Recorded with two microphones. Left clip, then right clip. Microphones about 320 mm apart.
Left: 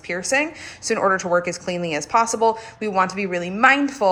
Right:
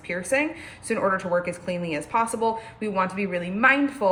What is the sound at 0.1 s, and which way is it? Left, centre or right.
A woman's voice, centre.